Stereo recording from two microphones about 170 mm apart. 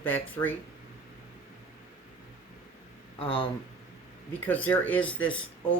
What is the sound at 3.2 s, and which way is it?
Speech, 35° left (ahead or behind).